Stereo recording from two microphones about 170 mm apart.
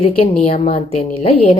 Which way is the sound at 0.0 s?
35° left (ahead or behind).